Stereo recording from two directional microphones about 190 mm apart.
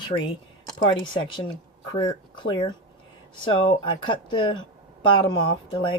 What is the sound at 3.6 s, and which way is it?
Speech, 25° left (ahead or behind).